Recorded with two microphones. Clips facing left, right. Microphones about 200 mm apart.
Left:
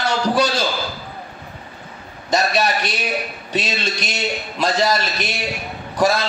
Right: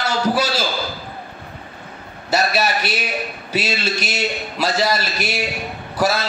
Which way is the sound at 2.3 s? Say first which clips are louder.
Even; 5° right (ahead or behind).